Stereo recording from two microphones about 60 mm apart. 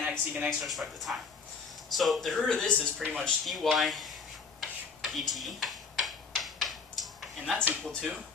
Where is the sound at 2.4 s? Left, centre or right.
Centre.